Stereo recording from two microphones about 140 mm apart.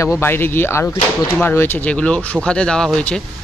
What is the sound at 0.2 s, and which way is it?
Speech, 15° left (ahead or behind).